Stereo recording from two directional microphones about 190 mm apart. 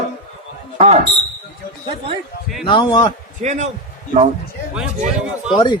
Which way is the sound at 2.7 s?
25° left (ahead or behind).